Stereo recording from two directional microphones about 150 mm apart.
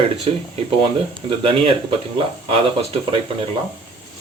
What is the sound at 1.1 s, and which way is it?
Speech, 35° right (ahead or behind).